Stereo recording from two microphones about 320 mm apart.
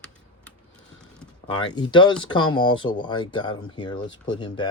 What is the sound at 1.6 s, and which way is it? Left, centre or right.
Speech, centre.